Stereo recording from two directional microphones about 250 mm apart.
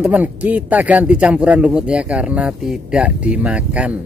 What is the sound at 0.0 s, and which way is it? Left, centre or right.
Speech, centre.